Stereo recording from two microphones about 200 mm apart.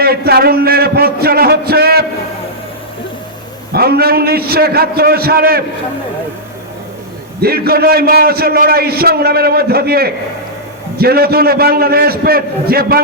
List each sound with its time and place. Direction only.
0.0 s a man's voice: 50° right (ahead or behind)
3.7 s a man's voice: 50° right (ahead or behind)
7.4 s a man's voice: 50° right (ahead or behind)